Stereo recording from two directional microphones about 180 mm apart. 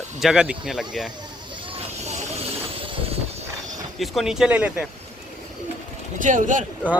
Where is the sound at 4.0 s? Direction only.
Centre (ahead or behind).